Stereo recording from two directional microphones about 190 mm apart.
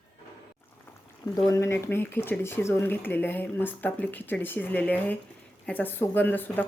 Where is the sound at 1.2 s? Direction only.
20° left (ahead or behind).